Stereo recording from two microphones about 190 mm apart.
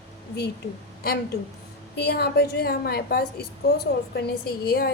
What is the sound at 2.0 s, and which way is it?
A woman's voice, 60° left (ahead or behind).